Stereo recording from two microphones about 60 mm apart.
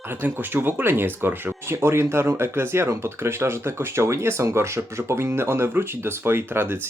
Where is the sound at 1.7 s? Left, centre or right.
Right.